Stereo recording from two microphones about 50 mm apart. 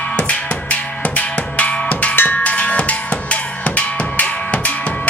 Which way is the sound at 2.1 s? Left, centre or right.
Left.